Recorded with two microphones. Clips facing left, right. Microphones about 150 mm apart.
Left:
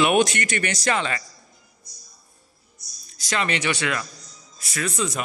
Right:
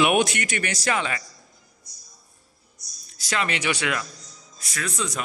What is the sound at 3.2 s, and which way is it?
Speech, 5° right (ahead or behind).